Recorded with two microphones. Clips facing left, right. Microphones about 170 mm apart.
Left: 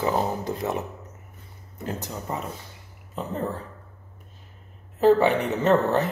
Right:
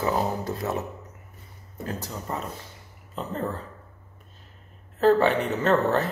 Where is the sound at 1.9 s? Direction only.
20° left (ahead or behind).